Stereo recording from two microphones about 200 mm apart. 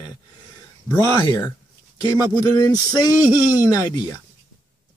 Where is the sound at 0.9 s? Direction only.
20° left (ahead or behind).